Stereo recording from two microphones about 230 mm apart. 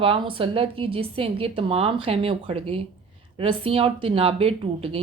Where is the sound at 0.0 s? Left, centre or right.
Right.